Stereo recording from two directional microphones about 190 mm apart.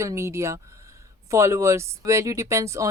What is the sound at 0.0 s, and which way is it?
Speech, 15° right (ahead or behind).